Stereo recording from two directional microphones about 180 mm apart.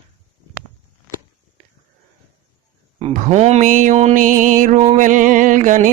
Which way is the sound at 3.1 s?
40° right (ahead or behind).